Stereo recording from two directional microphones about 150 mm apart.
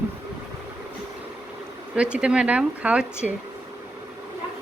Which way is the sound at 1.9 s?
5° right (ahead or behind).